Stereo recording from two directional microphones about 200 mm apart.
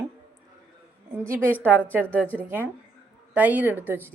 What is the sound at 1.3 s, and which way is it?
Speech, 10° right (ahead or behind).